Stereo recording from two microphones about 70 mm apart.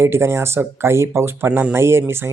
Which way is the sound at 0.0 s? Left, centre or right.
Right.